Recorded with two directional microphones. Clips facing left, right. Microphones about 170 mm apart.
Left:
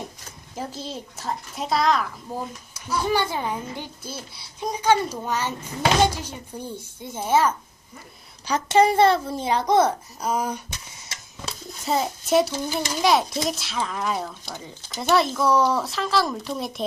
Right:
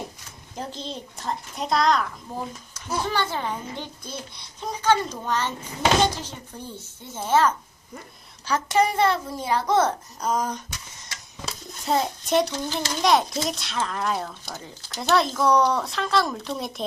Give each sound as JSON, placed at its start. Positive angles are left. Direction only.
{"t": 0.5, "sound": "a child's voice", "side_deg": 5}
{"t": 8.4, "sound": "a child's voice", "side_deg": 20}